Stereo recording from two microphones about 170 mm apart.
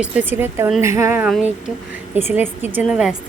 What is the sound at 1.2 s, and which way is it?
Speech, 5° right (ahead or behind).